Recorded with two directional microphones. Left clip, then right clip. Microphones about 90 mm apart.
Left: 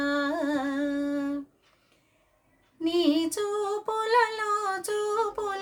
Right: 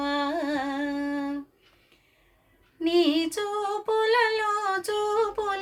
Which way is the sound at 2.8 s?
40° left (ahead or behind).